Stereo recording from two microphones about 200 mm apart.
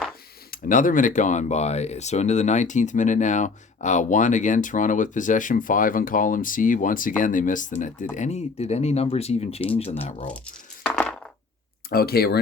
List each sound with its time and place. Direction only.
0.5 s speech: 40° left (ahead or behind)
10.3 s a sound: 5° left (ahead or behind)
11.9 s speech: 50° left (ahead or behind)